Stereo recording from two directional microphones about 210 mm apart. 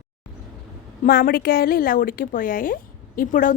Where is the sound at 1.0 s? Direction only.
45° left (ahead or behind).